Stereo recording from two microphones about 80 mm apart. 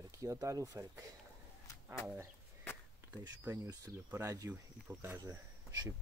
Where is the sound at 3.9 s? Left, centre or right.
Right.